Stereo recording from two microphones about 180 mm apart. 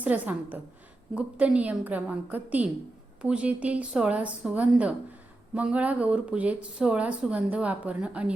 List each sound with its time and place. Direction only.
0.0 s speech: 10° right (ahead or behind)